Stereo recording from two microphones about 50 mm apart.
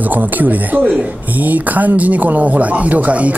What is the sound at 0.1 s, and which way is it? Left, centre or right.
Speech, right.